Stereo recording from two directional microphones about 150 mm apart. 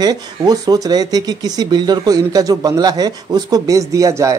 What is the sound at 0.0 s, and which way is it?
Speech, 25° right (ahead or behind).